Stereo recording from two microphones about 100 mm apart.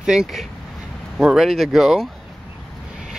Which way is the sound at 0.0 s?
5° right (ahead or behind).